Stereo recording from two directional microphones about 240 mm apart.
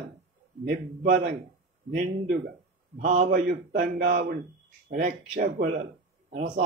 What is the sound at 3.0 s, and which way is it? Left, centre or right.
Speech, right.